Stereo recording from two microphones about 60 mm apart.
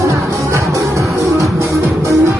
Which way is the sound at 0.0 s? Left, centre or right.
Right.